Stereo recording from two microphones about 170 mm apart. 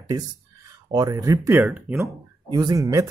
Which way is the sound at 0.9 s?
20° right (ahead or behind).